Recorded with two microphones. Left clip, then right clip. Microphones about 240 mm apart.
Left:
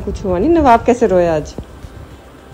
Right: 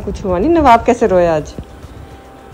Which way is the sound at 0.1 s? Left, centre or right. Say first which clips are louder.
Even; centre.